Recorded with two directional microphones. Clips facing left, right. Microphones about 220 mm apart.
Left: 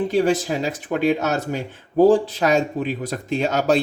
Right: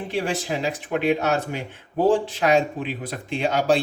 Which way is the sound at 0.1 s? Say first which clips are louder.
Left 6 dB; 40° left (ahead or behind).